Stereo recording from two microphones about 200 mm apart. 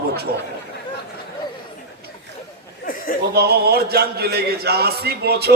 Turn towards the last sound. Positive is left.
turn(degrees=-55)  # may be behind; listen again after turning